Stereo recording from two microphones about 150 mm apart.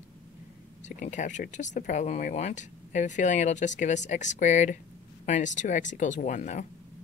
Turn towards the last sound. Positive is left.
turn(degrees=55)  # may be behind; listen again after turning